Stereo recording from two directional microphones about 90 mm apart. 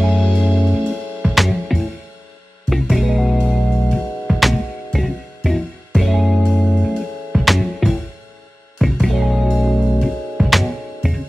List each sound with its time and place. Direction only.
0.0 s music: 10° left (ahead or behind)
0.6 s music: 15° right (ahead or behind)
1.2 s music: centre (ahead or behind)